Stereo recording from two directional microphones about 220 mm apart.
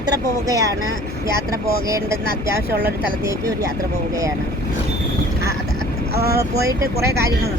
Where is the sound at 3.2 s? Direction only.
15° right (ahead or behind).